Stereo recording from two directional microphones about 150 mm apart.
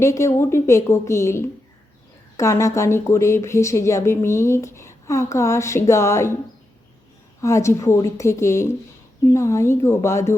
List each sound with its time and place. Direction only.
0.0 s speech: 20° left (ahead or behind)
7.4 s a woman's voice: 20° left (ahead or behind)